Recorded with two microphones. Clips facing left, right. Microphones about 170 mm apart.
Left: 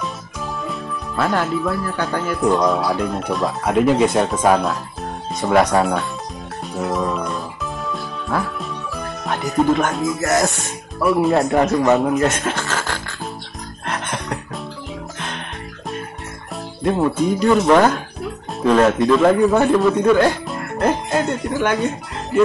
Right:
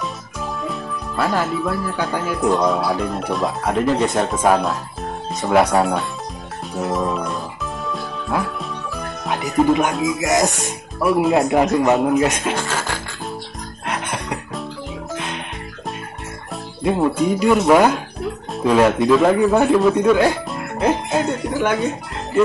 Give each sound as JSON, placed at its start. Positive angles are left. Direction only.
{"t": 0.7, "sound": "speech", "side_deg": -5}
{"t": 8.5, "sound": "music", "side_deg": 0}
{"t": 10.2, "sound": "speech", "side_deg": -15}
{"t": 11.9, "sound": "speech", "side_deg": -5}
{"t": 13.8, "sound": "music", "side_deg": -5}
{"t": 16.8, "sound": "speech", "side_deg": -5}